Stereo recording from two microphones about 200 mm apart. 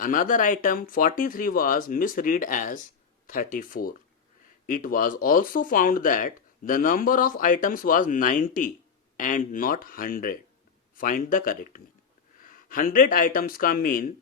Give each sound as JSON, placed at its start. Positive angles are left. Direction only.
{"t": 0.0, "sound": "speech", "side_deg": 40}